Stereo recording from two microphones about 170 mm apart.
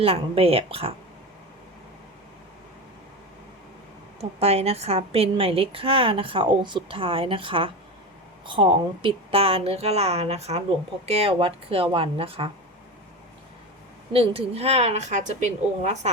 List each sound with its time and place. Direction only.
0.0 s speech: 35° right (ahead or behind)
4.2 s speech: 35° right (ahead or behind)
14.1 s speech: 35° right (ahead or behind)